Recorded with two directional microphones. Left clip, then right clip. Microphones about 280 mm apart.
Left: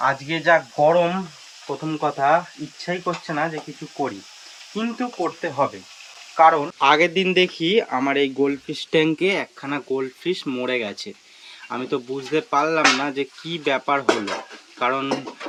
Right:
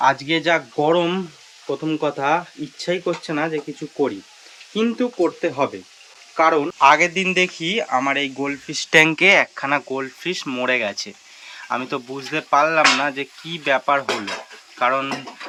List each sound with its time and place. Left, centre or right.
0.0 s speech: centre
4.7 s speech: centre
6.7 s speech: centre